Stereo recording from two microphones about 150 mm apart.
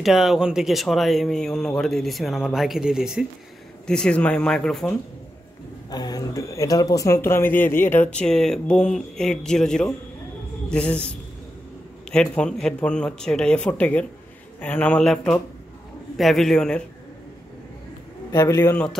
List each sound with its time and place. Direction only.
0.0 s speech: centre (ahead or behind)
5.9 s speech: 25° left (ahead or behind); by 11.1 s 5° left (ahead or behind)
12.1 s speech: 5° left (ahead or behind)
18.3 s a man's voice: 25° left (ahead or behind)